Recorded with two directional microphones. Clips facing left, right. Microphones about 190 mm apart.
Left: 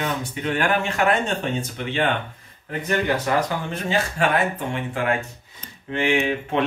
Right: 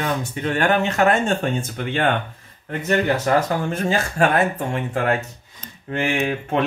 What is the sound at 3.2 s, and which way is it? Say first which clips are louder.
Speech: right 4 dB; 45° right (ahead or behind).